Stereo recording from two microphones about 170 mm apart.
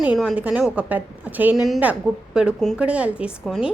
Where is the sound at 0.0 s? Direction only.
5° right (ahead or behind).